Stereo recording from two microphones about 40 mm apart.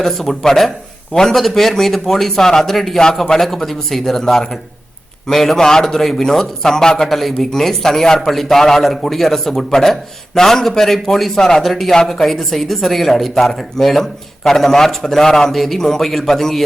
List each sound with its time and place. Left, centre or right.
0.0 s speech: centre
3.0 s speech: centre
7.1 s a man's voice: centre